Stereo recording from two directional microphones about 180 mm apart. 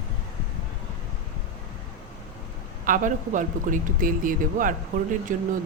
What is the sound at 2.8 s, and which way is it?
Speech, 45° right (ahead or behind).